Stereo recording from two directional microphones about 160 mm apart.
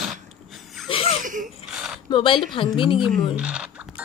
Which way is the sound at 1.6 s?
5° right (ahead or behind).